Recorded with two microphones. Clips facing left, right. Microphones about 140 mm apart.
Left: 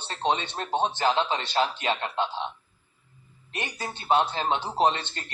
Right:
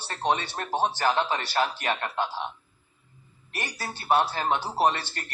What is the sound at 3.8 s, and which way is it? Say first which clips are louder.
Speech: even; 20° left (ahead or behind).